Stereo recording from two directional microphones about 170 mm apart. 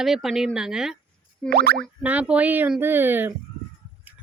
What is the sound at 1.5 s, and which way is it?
Speech, 65° right (ahead or behind).